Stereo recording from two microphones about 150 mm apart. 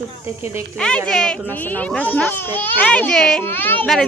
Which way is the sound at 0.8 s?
5° left (ahead or behind).